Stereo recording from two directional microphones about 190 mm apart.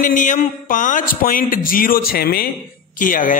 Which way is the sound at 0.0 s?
45° left (ahead or behind).